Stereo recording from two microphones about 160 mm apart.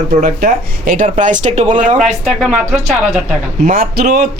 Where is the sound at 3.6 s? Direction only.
60° right (ahead or behind).